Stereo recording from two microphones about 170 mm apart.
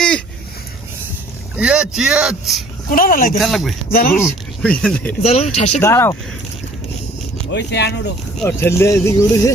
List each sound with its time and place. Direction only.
1.5 s speech: 5° right (ahead or behind)
2.9 s speech: 55° left (ahead or behind)
3.4 s speech: centre (ahead or behind)
3.9 s speech: 60° left (ahead or behind)
4.2 s speech: 10° left (ahead or behind)
5.2 s speech: 40° left (ahead or behind)
5.8 s speech: 15° left (ahead or behind)
7.5 s speech: 85° left
8.4 s speech: 15° left (ahead or behind)